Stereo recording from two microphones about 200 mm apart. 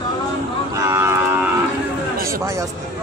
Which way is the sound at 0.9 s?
15° right (ahead or behind).